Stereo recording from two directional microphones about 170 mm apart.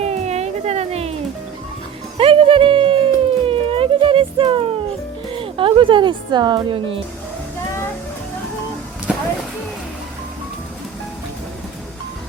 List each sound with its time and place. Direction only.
0.0 s a sound: 40° right (ahead or behind)
2.1 s music: 30° right (ahead or behind)
5.3 s a woman's voice: 30° right (ahead or behind)